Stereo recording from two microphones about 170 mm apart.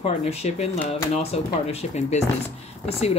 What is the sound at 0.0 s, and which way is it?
Speech, 35° left (ahead or behind).